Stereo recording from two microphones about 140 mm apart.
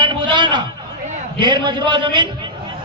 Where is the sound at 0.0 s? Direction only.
35° right (ahead or behind).